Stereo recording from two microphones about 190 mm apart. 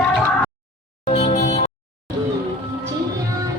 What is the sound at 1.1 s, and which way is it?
Music, 40° left (ahead or behind).